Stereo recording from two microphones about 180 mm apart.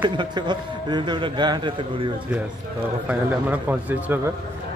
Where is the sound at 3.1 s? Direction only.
10° right (ahead or behind).